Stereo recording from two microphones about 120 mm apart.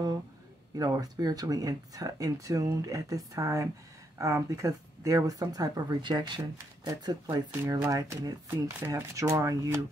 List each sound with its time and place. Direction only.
0.7 s speech: 30° right (ahead or behind)